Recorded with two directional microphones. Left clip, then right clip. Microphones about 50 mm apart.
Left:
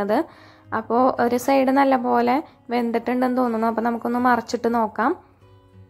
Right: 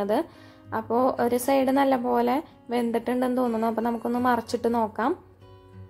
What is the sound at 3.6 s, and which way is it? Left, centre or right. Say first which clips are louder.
A woman's voice: left 4 dB; left.